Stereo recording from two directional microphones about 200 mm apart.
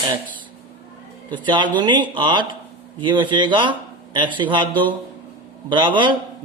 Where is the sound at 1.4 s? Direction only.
25° right (ahead or behind).